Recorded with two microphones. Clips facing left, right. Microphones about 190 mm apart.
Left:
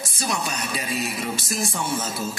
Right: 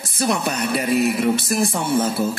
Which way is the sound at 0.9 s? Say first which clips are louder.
Right 12 dB; 60° right (ahead or behind).